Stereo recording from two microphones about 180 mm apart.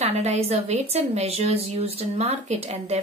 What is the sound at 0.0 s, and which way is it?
A woman's voice, 35° right (ahead or behind).